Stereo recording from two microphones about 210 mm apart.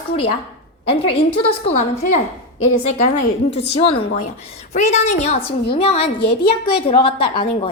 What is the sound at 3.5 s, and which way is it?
A woman's voice, 30° left (ahead or behind).